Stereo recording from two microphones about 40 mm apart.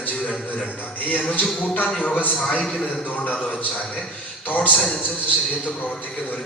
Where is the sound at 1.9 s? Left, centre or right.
Left.